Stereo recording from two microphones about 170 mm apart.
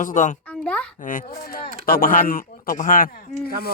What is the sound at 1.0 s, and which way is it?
Speech, 50° left (ahead or behind).